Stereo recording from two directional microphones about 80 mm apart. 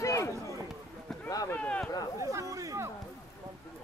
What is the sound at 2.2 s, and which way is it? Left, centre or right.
Chatter, right.